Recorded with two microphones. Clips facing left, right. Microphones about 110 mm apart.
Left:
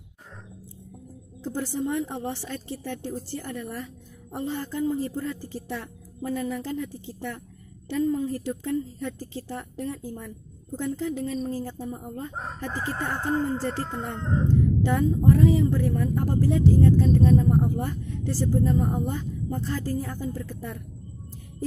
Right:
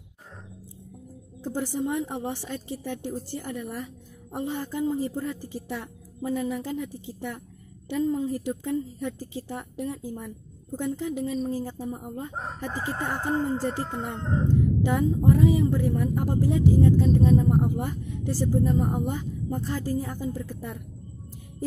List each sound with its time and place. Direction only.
1.4 s a woman's voice: 15° right (ahead or behind)